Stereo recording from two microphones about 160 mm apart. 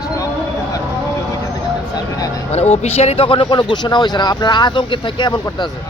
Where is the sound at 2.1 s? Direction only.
20° left (ahead or behind).